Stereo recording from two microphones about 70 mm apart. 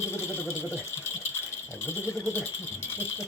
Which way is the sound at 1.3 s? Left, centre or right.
Left.